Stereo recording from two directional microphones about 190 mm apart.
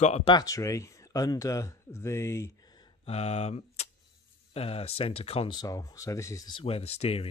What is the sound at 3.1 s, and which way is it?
Speech, 35° left (ahead or behind).